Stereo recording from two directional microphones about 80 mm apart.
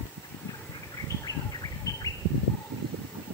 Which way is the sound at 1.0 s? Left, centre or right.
Left.